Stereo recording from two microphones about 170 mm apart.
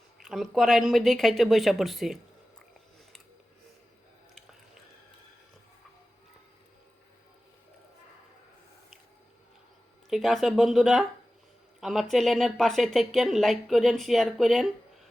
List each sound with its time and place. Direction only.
0.3 s a woman's voice: centre (ahead or behind)
10.1 s a woman's voice: centre (ahead or behind)